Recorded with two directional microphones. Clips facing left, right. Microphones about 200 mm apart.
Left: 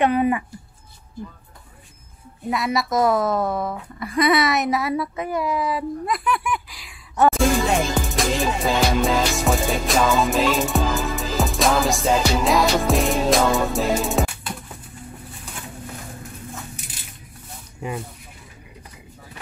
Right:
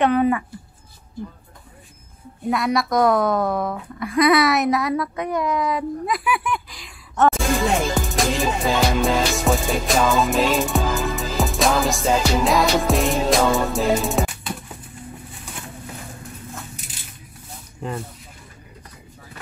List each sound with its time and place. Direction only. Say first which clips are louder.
0.0 s speech: right 1 dB; 10° left (ahead or behind)
2.5 s speech: right 2 dB; centre (ahead or behind)
17.8 s speech: even; 10° left (ahead or behind)